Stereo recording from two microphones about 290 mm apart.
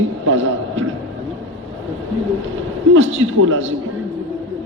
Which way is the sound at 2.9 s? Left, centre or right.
Right.